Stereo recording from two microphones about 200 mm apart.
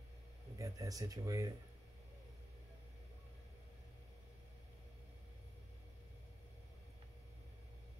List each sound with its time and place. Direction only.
0.6 s speech: 15° right (ahead or behind)